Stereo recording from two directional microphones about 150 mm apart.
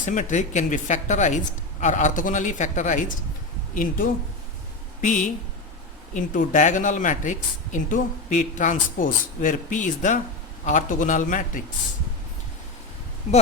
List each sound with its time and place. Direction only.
0.0 s a woman's voice: 55° left (ahead or behind)
3.8 s a woman's voice: 65° left (ahead or behind)